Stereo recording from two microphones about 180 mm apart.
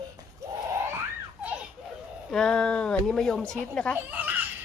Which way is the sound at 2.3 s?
5° left (ahead or behind).